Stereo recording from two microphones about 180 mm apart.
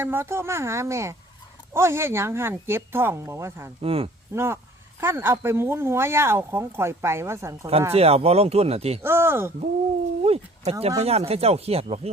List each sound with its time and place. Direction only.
0.0 s speech: 10° right (ahead or behind)
3.8 s speech: 30° right (ahead or behind)
4.4 s speech: 15° right (ahead or behind)
7.9 s speech: 35° right (ahead or behind)
9.0 s speech: 15° right (ahead or behind)
10.3 s speech: 35° right (ahead or behind)